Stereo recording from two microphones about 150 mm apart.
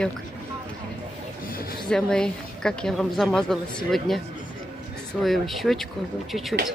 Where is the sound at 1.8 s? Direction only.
5° left (ahead or behind).